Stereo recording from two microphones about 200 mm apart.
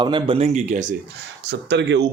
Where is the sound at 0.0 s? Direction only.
25° right (ahead or behind).